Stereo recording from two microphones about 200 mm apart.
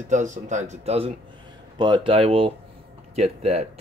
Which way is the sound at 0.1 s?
40° right (ahead or behind).